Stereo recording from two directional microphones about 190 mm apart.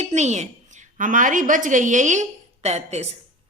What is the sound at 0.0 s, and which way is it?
A woman's voice, 35° right (ahead or behind).